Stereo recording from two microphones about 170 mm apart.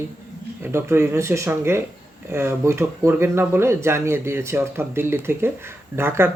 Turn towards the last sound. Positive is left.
turn(degrees=-15)  # may be behind; listen again after turning